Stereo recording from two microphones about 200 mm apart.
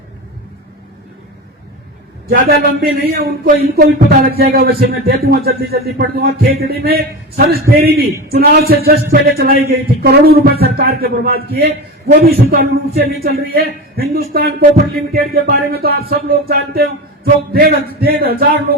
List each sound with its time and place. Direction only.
2.3 s speech: 45° right (ahead or behind)